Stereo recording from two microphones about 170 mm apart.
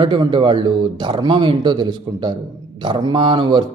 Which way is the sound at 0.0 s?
30° right (ahead or behind).